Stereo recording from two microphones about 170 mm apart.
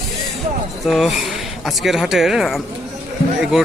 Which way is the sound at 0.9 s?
Centre (ahead or behind).